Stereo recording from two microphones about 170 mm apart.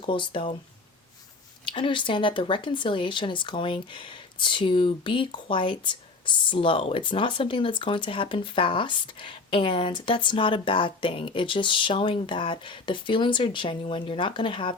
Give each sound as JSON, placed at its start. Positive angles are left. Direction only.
{"t": 0.0, "sound": "speech", "side_deg": 30}
{"t": 1.6, "sound": "speech", "side_deg": 30}